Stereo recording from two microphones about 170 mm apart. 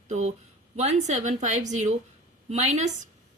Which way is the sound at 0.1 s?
45° right (ahead or behind).